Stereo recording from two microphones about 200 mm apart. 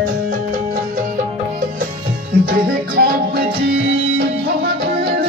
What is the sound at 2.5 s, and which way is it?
Music, 50° right (ahead or behind).